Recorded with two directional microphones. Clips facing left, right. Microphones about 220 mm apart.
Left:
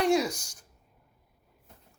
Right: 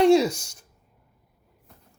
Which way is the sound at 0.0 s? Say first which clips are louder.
Right 8 dB; 25° right (ahead or behind).